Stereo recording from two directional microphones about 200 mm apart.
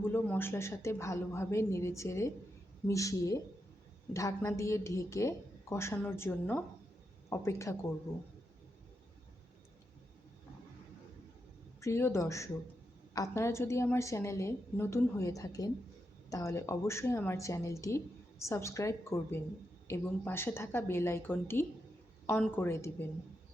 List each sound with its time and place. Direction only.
0.0 s a woman's voice: 10° left (ahead or behind)
11.8 s a woman's voice: 15° left (ahead or behind)